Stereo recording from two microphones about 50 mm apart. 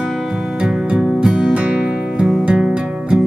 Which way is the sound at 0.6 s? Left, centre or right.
Centre.